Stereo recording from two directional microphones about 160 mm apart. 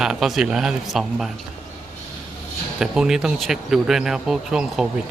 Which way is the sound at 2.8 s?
5° right (ahead or behind).